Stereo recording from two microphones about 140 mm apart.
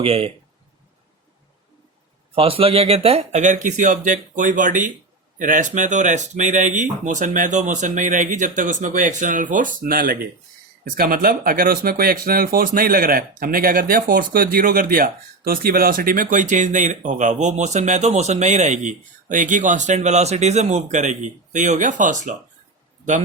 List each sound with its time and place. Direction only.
0.0 s speech: 40° right (ahead or behind)
2.3 s speech: 40° right (ahead or behind); by 22.4 s 65° right (ahead or behind)